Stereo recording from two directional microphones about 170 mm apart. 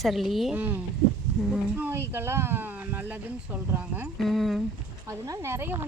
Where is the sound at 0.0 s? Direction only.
Centre (ahead or behind).